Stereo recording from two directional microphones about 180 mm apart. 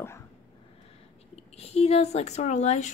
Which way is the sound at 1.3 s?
35° left (ahead or behind).